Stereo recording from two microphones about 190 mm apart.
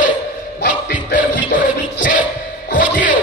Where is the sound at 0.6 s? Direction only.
55° left (ahead or behind).